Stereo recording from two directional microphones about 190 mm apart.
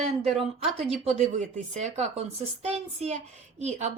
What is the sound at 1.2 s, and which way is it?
A woman's voice, 40° right (ahead or behind).